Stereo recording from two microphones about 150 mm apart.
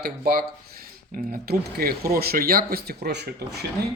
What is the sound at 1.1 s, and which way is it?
Speech, 90° right.